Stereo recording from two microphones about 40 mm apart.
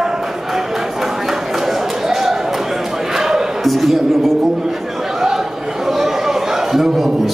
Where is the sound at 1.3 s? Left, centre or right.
Centre.